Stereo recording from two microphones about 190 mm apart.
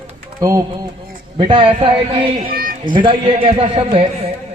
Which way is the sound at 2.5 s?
50° right (ahead or behind).